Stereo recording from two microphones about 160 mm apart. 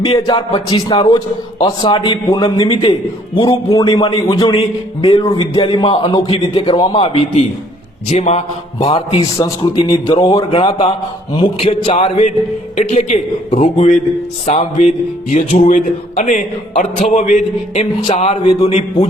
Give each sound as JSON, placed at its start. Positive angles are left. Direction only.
{"t": 0.0, "sound": "a man's voice", "side_deg": 35}